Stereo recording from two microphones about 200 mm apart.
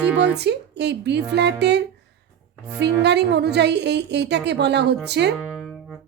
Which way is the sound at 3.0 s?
60° right (ahead or behind).